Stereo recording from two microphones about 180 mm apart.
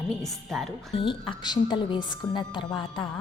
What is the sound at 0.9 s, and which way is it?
A woman's voice, 30° left (ahead or behind).